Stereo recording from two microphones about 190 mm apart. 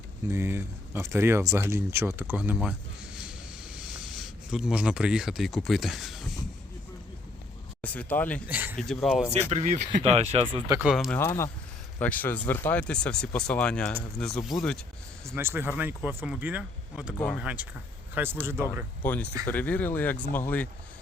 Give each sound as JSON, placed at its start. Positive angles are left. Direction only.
{"t": 0.3, "sound": "speech", "side_deg": -15}
{"t": 3.2, "sound": "a sound", "side_deg": -5}
{"t": 7.8, "sound": "speech", "side_deg": 10}
{"t": 8.4, "sound": "speech", "side_deg": -10}
{"t": 8.8, "sound": "speech", "side_deg": 0}
{"t": 9.5, "sound": "speech", "side_deg": -35}
{"t": 10.9, "sound": "speech", "side_deg": 0}
{"t": 11.2, "sound": "speech", "side_deg": 15}
{"t": 15.4, "sound": "speech", "side_deg": -10}
{"t": 19.0, "sound": "speech", "side_deg": 10}